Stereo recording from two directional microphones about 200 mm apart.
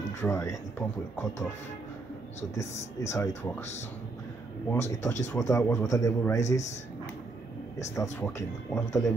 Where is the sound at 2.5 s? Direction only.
15° left (ahead or behind).